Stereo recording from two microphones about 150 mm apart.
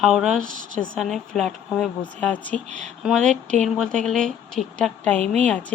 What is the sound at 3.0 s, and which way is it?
Speech, 5° left (ahead or behind).